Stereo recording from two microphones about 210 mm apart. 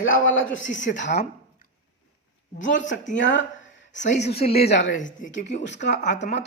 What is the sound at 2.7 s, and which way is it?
A man's voice, 35° left (ahead or behind).